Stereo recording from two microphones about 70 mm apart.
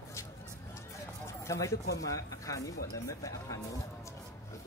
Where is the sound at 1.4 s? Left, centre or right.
Left.